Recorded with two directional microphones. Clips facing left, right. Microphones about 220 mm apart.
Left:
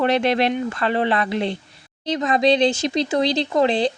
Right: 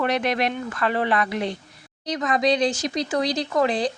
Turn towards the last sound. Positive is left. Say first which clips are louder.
# left 3 dB
turn(degrees=25)  # may be behind; listen again after turning